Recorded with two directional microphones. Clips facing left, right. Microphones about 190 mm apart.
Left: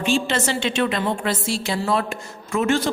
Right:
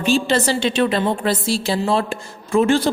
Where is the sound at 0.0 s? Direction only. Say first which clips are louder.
Right 4 dB; 35° right (ahead or behind).